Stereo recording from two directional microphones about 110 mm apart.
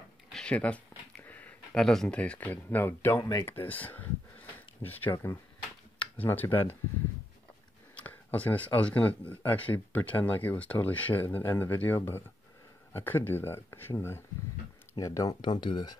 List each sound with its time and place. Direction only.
0.3 s a sound: 10° left (ahead or behind)
1.8 s speech: 5° left (ahead or behind); by 3.2 s 20° left (ahead or behind)
3.2 s speech: 40° left (ahead or behind)
3.4 s speech: 15° left (ahead or behind)
7.9 s speech: 15° left (ahead or behind); by 15.3 s 30° left (ahead or behind)
15.4 s speech: 45° left (ahead or behind)